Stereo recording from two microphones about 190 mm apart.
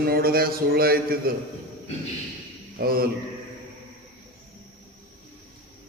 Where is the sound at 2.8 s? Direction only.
50° right (ahead or behind).